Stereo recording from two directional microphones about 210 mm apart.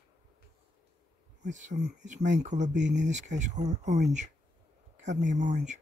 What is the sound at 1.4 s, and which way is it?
Speech, 35° right (ahead or behind).